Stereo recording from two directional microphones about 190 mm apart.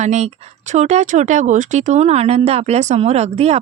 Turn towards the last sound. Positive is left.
turn(degrees=-35)  # may be behind; listen again after turning